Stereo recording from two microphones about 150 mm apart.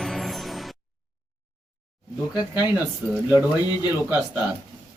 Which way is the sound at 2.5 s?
10° right (ahead or behind).